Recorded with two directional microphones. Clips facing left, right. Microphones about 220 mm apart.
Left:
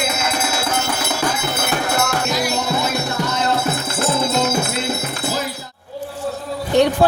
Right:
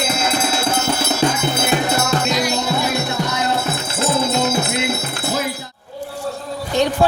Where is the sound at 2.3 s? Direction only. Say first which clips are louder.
Right 1 dB; 5° left (ahead or behind).